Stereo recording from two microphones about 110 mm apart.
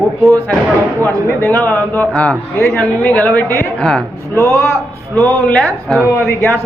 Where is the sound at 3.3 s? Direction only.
25° left (ahead or behind).